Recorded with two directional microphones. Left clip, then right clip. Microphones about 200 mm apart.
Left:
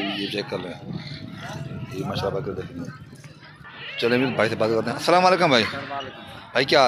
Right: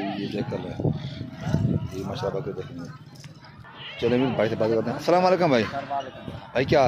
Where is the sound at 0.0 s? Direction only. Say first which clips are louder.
Left 3 dB; 45° right (ahead or behind).